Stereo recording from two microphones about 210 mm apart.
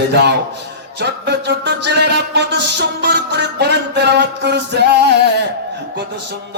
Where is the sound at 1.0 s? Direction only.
55° right (ahead or behind).